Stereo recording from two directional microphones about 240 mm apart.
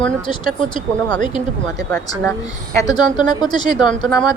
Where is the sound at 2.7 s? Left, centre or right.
Centre.